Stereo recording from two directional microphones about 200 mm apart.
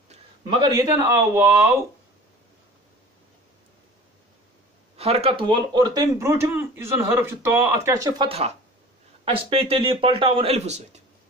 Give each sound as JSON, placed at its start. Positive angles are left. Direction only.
{"t": 0.1, "sound": "speech", "side_deg": -20}
{"t": 4.9, "sound": "speech", "side_deg": -30}
{"t": 8.3, "sound": "speech", "side_deg": -30}